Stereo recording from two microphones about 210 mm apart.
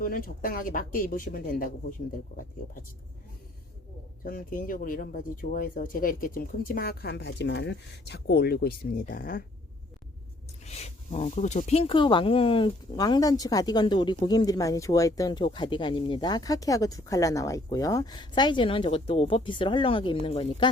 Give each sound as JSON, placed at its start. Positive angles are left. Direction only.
{"t": 0.0, "sound": "speech", "side_deg": 40}
{"t": 4.2, "sound": "speech", "side_deg": 40}
{"t": 10.7, "sound": "speech", "side_deg": 30}